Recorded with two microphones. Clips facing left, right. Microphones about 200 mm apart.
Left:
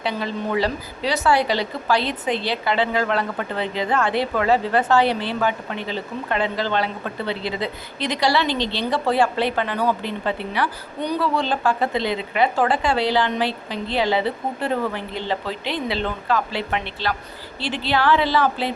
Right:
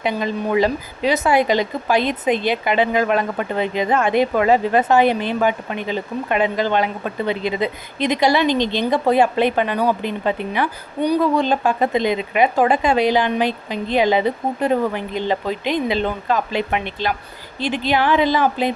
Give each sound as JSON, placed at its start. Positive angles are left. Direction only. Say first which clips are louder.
{"t": 0.0, "sound": "a woman's voice", "louder": "right 4 dB", "side_deg": -15}